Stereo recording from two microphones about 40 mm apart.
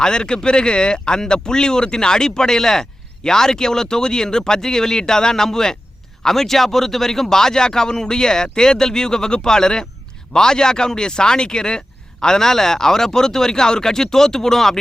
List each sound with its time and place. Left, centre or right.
0.0 s speech: centre